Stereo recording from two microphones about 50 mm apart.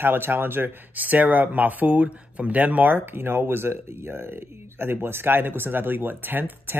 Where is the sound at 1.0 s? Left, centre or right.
Right.